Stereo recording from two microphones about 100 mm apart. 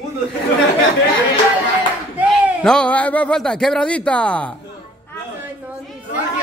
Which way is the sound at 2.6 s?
10° left (ahead or behind).